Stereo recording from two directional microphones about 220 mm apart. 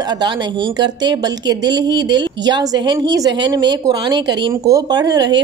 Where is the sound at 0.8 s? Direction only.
20° right (ahead or behind).